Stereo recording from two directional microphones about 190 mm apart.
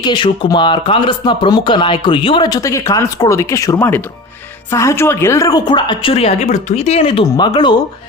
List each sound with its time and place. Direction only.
0.0 s speech: 25° left (ahead or behind)